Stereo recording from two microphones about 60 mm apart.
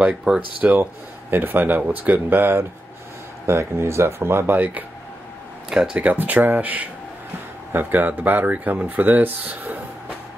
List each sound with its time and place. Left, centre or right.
0.3 s speech: centre
0.6 s speech: right
3.4 s speech: right
5.7 s speech: centre
5.9 s speech: right